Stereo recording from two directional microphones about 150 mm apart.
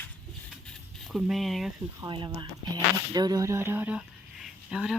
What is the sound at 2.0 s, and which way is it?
Speech, 30° right (ahead or behind).